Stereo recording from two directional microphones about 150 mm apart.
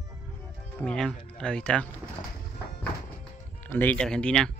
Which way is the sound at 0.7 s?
5° left (ahead or behind).